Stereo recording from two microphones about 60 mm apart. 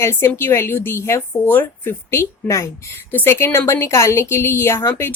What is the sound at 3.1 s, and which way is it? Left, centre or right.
A woman's voice, left.